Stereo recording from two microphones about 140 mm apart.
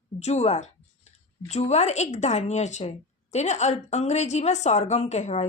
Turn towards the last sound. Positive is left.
turn(degrees=55)  # may be behind; listen again after turning